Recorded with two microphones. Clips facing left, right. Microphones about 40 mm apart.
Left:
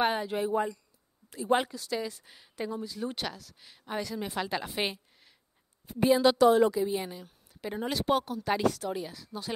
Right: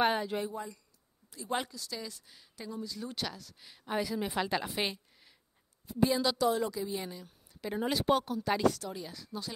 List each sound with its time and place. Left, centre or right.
0.0 s a woman's voice: centre
0.5 s speech: left
1.3 s speech: left
2.0 s a woman's voice: left
3.3 s a woman's voice: centre
4.8 s a sound: centre
5.9 s a woman's voice: left
6.7 s a woman's voice: left
7.2 s a woman's voice: centre
8.5 s a woman's voice: centre
9.1 s a woman's voice: centre